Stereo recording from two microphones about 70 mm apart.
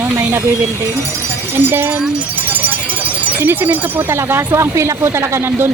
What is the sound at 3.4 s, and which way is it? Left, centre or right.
Speech, right.